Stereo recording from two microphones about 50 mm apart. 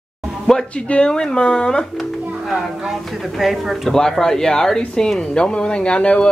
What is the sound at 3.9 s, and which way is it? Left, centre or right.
Speech, centre.